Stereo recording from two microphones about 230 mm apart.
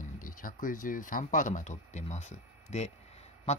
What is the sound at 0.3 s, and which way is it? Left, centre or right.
Speech, left.